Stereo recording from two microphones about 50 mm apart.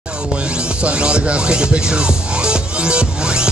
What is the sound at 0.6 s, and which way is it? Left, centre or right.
Music, right.